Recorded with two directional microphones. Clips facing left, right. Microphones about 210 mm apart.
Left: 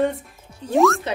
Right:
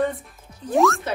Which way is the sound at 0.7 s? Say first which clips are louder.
Left 2 dB; centre (ahead or behind).